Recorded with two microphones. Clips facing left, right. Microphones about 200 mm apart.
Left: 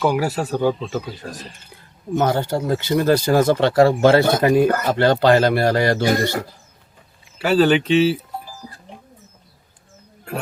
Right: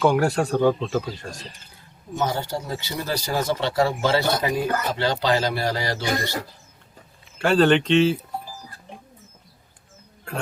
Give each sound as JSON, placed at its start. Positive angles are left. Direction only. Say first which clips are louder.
{"t": 0.0, "sound": "speech", "louder": "even", "side_deg": 5}
{"t": 2.1, "sound": "speech", "louder": "left 6 dB", "side_deg": 55}
{"t": 7.3, "sound": "speech", "louder": "left 2 dB", "side_deg": 5}